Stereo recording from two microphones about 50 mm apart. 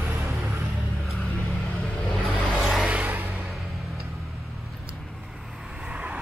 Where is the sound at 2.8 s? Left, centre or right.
Right.